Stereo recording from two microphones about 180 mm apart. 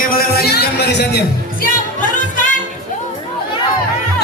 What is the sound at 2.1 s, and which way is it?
Music, 45° left (ahead or behind).